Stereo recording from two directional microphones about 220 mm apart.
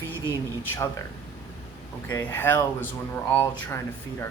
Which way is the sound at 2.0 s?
10° left (ahead or behind).